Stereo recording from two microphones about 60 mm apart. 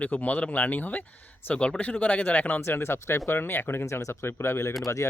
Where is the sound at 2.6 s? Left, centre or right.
Left.